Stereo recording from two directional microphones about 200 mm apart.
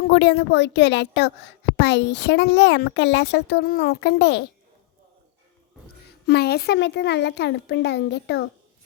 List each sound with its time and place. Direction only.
0.0 s speech: 60° left (ahead or behind)
6.2 s speech: 55° left (ahead or behind)